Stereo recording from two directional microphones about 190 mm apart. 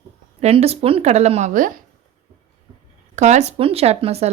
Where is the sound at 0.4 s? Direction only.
35° right (ahead or behind).